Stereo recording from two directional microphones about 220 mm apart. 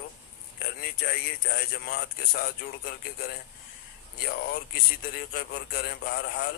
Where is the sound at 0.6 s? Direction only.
45° left (ahead or behind).